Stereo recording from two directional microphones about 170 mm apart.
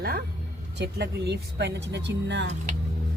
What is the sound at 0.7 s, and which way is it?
Speech, 80° right.